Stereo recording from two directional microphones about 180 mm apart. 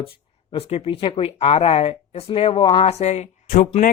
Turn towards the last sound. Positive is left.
turn(degrees=45)  # may be behind; listen again after turning